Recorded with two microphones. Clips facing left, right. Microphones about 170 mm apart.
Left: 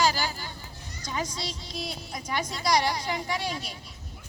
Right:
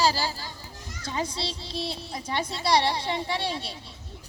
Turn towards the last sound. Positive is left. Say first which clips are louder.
# right 2 dB
turn(degrees=-30)  # may be behind; listen again after turning